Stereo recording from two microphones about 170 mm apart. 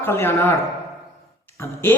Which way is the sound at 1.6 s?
15° left (ahead or behind).